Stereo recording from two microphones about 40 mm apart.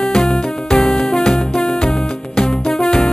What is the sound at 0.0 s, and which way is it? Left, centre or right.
Music, centre.